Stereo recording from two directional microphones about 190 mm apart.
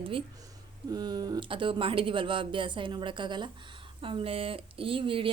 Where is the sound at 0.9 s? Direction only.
20° right (ahead or behind).